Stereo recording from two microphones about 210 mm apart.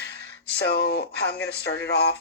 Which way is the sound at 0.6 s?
50° left (ahead or behind).